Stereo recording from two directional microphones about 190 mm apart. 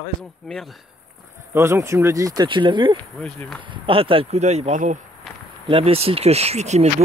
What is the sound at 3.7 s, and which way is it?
Speech, 30° right (ahead or behind).